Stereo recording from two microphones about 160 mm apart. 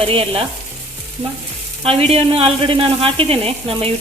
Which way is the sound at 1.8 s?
35° right (ahead or behind).